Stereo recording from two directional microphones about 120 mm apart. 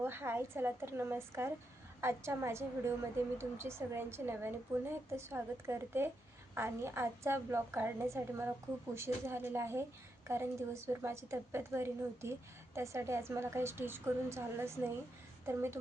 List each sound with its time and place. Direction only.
0.0 s a woman's voice: 20° right (ahead or behind)